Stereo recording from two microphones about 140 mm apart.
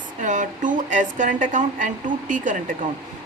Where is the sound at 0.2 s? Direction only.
65° right (ahead or behind).